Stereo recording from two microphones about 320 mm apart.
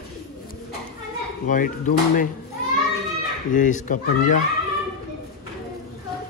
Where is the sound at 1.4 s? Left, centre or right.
Left.